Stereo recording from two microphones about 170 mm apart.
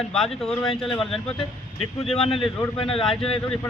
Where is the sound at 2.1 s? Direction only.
35° left (ahead or behind).